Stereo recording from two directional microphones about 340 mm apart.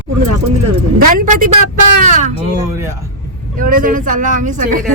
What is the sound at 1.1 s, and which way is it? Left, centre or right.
Speech, right.